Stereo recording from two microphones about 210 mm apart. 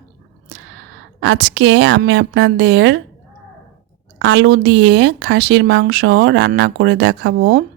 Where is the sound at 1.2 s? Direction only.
60° right (ahead or behind).